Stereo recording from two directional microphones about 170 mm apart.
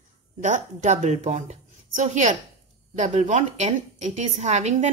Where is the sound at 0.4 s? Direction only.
45° right (ahead or behind).